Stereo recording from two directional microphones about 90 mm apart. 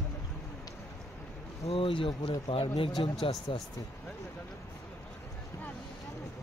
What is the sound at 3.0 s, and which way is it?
Speech, 65° left (ahead or behind).